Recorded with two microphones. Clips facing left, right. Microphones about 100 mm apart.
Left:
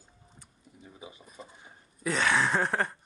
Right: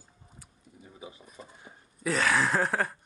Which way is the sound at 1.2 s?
Centre (ahead or behind).